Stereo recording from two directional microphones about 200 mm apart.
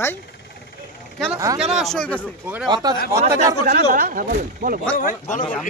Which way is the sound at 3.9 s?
40° right (ahead or behind).